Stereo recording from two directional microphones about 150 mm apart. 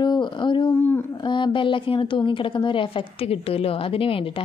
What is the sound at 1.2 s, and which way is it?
A woman's voice, 30° left (ahead or behind).